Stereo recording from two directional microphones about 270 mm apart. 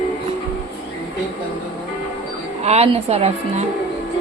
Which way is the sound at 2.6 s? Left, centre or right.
Right.